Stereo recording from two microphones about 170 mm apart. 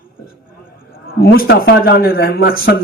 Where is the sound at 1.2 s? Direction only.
65° left (ahead or behind).